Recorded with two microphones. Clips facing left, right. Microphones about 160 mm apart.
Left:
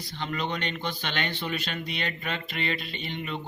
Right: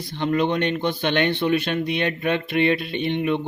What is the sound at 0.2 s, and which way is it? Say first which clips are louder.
Speech: right 10 dB; 55° right (ahead or behind).